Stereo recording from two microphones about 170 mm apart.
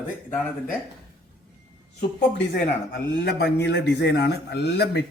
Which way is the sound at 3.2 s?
85° left.